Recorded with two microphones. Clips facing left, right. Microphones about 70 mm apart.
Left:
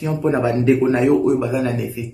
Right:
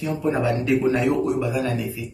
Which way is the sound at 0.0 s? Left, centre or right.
Left.